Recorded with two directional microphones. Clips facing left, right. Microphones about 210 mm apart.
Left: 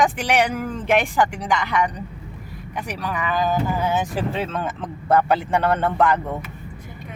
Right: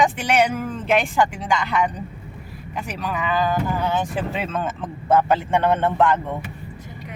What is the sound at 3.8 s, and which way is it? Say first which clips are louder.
Speech: left 1 dB; 10° left (ahead or behind).